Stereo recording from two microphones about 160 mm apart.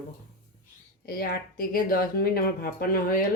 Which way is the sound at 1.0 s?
70° left (ahead or behind).